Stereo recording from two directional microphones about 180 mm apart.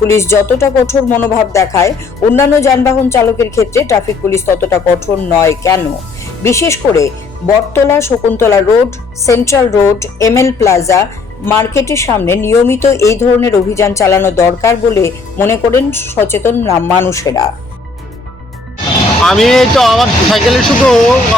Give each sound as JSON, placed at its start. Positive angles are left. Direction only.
{"t": 0.0, "sound": "a woman's voice", "side_deg": 15}
{"t": 19.2, "sound": "speech", "side_deg": 0}